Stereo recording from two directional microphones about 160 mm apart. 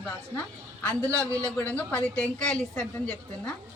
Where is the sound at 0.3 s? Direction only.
10° left (ahead or behind).